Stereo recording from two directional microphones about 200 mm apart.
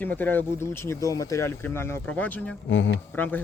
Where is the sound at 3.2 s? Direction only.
10° left (ahead or behind).